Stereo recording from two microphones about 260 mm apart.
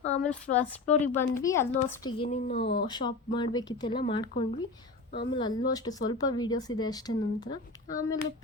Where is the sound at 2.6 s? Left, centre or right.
Left.